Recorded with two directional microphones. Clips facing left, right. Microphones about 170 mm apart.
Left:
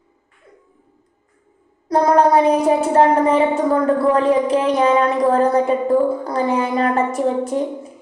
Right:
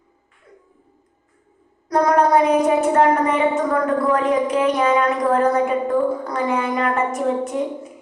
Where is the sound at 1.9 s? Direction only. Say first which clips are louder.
Left 2 dB; 30° left (ahead or behind).